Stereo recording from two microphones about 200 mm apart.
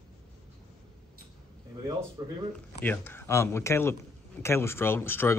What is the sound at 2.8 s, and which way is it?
Speech, 10° left (ahead or behind).